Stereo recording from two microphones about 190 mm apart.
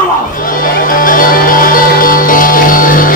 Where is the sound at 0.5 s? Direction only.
45° left (ahead or behind).